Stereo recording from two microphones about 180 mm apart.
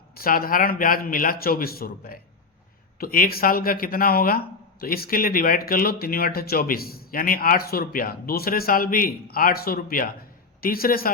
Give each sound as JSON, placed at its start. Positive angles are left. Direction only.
{"t": 0.1, "sound": "a man's voice", "side_deg": 55}